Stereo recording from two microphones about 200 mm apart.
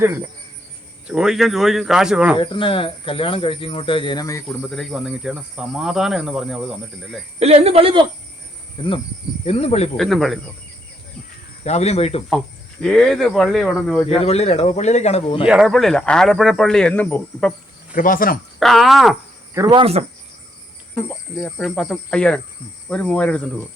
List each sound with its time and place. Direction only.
1.0 s speech: 5° right (ahead or behind)
2.4 s speech: 25° left (ahead or behind)
4.4 s speech: centre (ahead or behind)
7.3 s speech: 30° right (ahead or behind)
8.8 s speech: 25° left (ahead or behind)
10.0 s speech: centre (ahead or behind)
11.6 s speech: 35° left (ahead or behind)
12.8 s speech: centre (ahead or behind)
14.1 s speech: 30° left (ahead or behind)
15.4 s speech: 5° right (ahead or behind)
17.9 s speech: 45° left (ahead or behind)
18.6 s speech: centre (ahead or behind)
19.5 s speech: 20° right (ahead or behind)
21.1 s speech: centre (ahead or behind)